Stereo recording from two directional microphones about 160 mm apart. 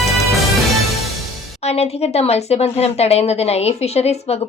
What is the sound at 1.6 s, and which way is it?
A woman's voice, 40° left (ahead or behind).